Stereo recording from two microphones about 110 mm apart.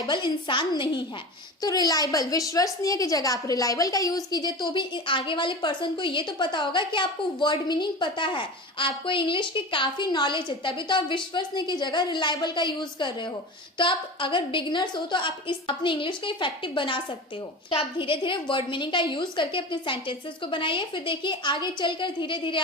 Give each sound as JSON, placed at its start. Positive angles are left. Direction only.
{"t": 0.1, "sound": "a woman's voice", "side_deg": 45}